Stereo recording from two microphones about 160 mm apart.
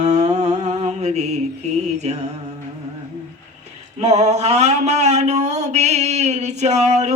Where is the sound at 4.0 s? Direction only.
45° right (ahead or behind).